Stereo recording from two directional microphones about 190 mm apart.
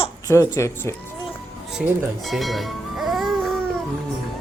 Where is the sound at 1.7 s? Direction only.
Centre (ahead or behind).